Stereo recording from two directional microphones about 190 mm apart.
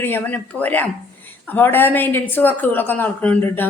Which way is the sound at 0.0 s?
10° left (ahead or behind).